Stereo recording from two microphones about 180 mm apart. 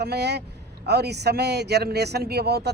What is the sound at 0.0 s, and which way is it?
Speech, 65° right (ahead or behind).